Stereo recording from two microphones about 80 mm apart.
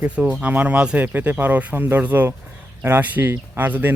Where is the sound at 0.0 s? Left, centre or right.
Centre.